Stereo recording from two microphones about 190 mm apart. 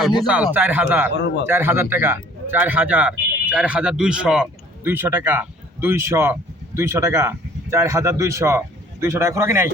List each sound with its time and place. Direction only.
0.2 s a man's voice: 5° right (ahead or behind)
1.1 s speech: 60° left (ahead or behind)
1.5 s a man's voice: 10° right (ahead or behind)